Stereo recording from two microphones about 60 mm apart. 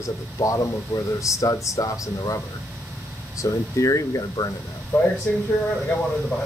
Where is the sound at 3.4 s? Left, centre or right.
Left.